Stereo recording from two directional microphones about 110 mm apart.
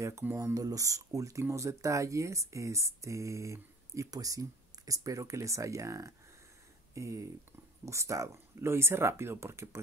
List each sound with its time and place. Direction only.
0.0 s speech: 25° right (ahead or behind)